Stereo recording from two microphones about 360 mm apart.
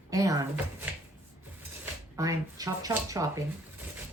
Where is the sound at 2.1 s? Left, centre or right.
Centre.